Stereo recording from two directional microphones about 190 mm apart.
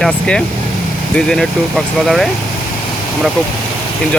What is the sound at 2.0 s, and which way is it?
Speech, centre (ahead or behind).